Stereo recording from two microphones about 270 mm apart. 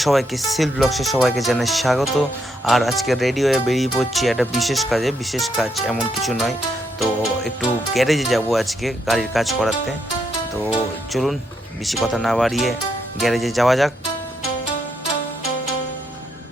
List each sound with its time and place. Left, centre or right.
0.0 s speech: centre
10.5 s music: centre
11.9 s speech: centre